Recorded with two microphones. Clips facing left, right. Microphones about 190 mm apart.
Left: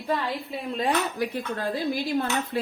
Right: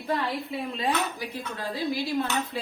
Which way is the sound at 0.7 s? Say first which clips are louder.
Left 4 dB; 55° left (ahead or behind).